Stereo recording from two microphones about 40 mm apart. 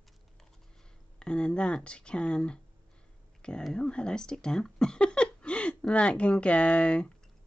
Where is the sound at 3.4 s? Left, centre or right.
Left.